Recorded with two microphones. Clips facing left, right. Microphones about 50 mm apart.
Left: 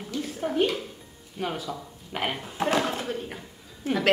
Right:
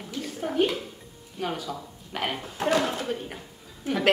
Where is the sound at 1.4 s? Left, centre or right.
Centre.